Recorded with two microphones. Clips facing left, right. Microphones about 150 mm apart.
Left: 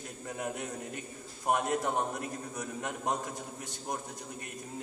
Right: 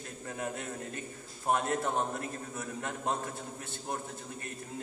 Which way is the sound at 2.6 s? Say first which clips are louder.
Even; 15° left (ahead or behind).